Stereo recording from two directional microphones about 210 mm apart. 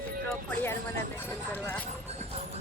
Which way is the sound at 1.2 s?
10° left (ahead or behind).